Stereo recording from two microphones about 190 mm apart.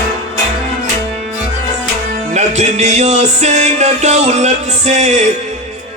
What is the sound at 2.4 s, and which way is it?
Music, 35° right (ahead or behind).